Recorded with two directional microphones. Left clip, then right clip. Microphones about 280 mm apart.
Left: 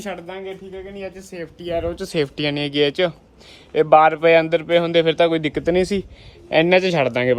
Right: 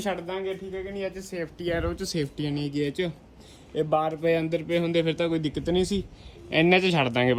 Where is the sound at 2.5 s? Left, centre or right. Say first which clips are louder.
Left 9 dB; left.